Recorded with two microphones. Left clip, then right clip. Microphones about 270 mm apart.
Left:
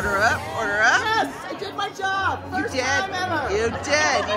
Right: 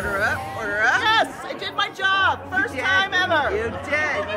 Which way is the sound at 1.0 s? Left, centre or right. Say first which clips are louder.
Right 3 dB; right.